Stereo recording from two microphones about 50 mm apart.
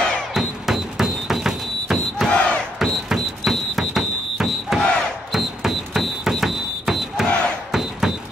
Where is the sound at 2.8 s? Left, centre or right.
Centre.